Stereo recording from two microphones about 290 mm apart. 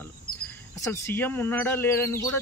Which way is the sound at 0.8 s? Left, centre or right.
Centre.